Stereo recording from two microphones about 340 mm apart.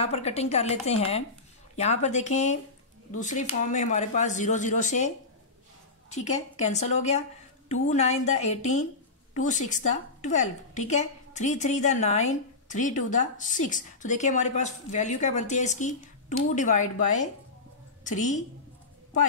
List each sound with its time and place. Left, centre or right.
0.0 s a woman's voice: centre